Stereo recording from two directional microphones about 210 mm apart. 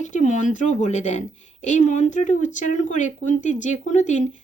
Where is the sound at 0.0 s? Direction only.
35° left (ahead or behind).